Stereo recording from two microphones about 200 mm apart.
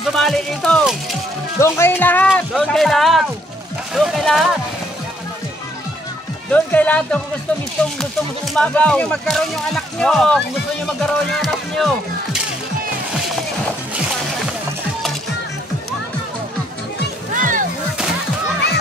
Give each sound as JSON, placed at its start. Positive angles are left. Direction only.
{"t": 0.1, "sound": "speech", "side_deg": 0}
{"t": 2.3, "sound": "a sound", "side_deg": 0}
{"t": 6.5, "sound": "speech", "side_deg": 5}
{"t": 8.5, "sound": "speech", "side_deg": 5}
{"t": 17.3, "sound": "music", "side_deg": -40}